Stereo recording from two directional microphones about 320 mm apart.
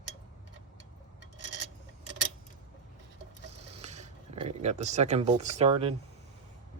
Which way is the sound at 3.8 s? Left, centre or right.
Right.